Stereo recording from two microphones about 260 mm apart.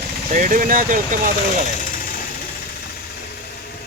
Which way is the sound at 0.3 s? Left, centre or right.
Right.